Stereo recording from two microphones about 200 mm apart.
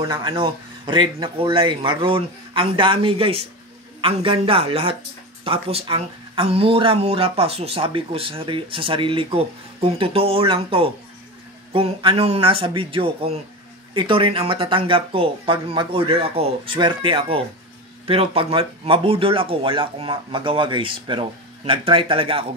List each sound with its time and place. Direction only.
0.0 s speech: 20° right (ahead or behind)